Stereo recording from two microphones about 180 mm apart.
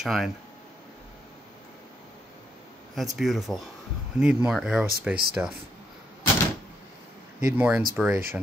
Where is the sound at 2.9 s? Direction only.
Centre (ahead or behind).